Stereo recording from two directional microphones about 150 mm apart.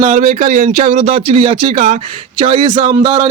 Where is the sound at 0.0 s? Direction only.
50° right (ahead or behind).